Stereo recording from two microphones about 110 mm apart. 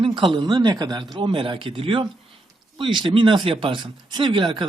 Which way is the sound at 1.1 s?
50° right (ahead or behind).